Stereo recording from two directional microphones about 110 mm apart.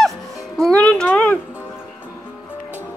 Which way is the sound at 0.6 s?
10° left (ahead or behind).